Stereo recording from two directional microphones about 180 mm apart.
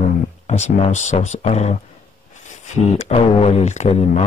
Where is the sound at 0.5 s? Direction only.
40° left (ahead or behind).